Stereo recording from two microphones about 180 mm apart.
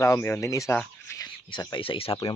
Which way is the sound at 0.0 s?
15° left (ahead or behind).